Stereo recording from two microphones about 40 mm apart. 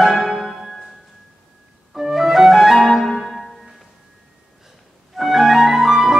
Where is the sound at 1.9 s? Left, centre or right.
Centre.